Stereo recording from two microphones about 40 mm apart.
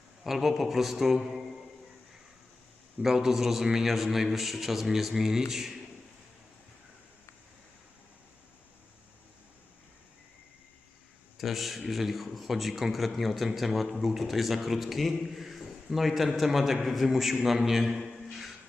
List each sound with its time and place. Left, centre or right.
0.3 s a man's voice: centre
3.0 s a man's voice: centre
11.3 s a man's voice: centre
18.1 s a sound: centre